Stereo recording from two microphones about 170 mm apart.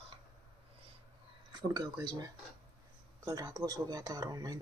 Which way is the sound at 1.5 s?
25° right (ahead or behind).